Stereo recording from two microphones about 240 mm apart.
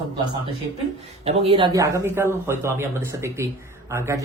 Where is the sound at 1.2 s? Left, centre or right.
Right.